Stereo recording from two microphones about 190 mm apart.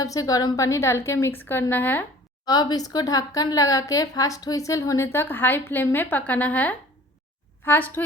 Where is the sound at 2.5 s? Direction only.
20° left (ahead or behind).